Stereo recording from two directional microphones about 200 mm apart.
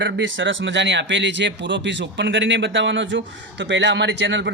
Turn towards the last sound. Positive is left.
turn(degrees=-65)  # may be behind; listen again after turning